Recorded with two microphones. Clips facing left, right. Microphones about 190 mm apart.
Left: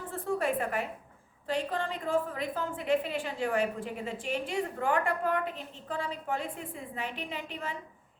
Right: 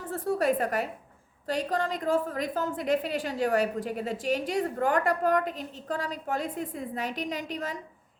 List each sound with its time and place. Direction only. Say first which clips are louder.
0.1 s a woman's voice: right 4 dB; 40° right (ahead or behind)